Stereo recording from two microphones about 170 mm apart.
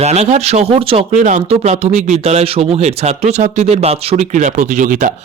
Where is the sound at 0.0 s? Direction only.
40° right (ahead or behind).